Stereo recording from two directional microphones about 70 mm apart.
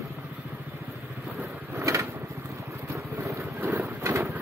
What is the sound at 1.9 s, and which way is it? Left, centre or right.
Vehicle, right.